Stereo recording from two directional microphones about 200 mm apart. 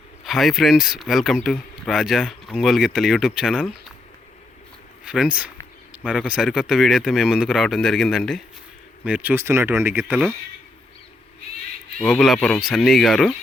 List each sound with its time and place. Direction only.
0.3 s speech: centre (ahead or behind)
5.0 s speech: 5° right (ahead or behind)
12.0 s speech: centre (ahead or behind)